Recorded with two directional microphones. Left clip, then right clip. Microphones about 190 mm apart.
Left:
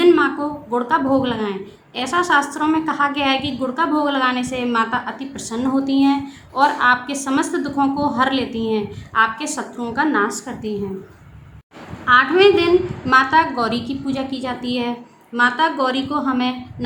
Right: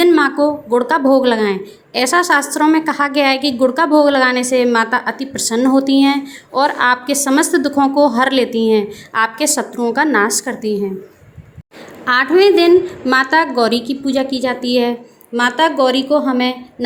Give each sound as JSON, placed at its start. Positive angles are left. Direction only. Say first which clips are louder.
{"t": 0.0, "sound": "speech", "louder": "right 3 dB", "side_deg": -25}
{"t": 12.0, "sound": "speech", "louder": "right 1 dB", "side_deg": -30}